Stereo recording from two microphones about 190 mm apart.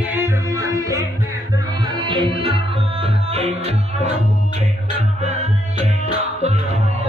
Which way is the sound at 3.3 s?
35° right (ahead or behind).